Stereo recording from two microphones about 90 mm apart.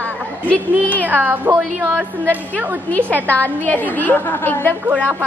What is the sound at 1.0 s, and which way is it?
Speech, 20° right (ahead or behind).